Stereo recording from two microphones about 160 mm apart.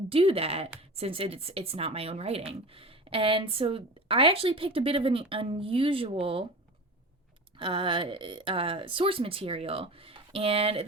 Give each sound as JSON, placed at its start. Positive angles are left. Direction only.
{"t": 0.1, "sound": "a woman's voice", "side_deg": -35}
{"t": 7.6, "sound": "a woman's voice", "side_deg": -30}